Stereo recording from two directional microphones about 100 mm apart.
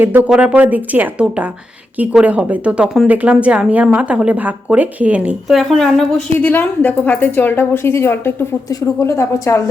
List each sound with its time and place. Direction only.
0.0 s speech: 20° right (ahead or behind)
5.5 s a woman's voice: centre (ahead or behind)
6.4 s a woman's voice: 20° left (ahead or behind)